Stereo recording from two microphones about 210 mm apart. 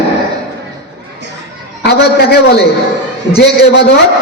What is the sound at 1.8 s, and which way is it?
A man's voice, 50° left (ahead or behind).